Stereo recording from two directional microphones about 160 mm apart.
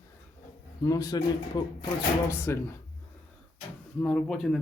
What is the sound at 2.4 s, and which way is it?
Speech, 15° left (ahead or behind).